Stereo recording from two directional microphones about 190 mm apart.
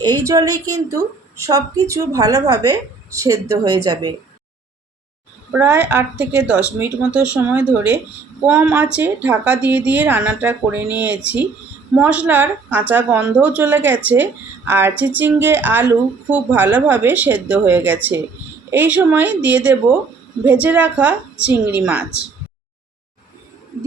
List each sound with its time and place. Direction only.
0.0 s a woman's voice: 20° right (ahead or behind)
5.5 s a woman's voice: 10° right (ahead or behind)